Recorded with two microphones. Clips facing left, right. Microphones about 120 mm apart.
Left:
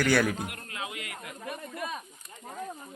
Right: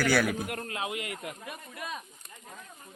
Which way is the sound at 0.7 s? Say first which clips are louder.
Right 4 dB; 25° right (ahead or behind).